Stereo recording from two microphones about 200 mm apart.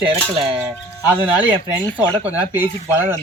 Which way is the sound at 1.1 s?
10° right (ahead or behind).